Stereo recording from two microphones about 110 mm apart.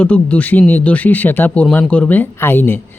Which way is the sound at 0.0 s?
15° left (ahead or behind).